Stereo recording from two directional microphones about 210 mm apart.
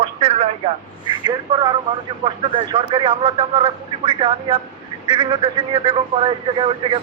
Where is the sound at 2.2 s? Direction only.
25° right (ahead or behind).